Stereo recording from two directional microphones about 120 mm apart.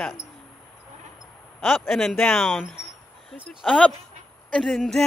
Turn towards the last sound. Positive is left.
turn(degrees=0)  # may be behind; listen again after turning